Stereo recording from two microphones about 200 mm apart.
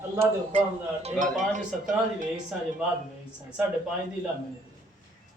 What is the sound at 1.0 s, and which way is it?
Speech, 40° right (ahead or behind).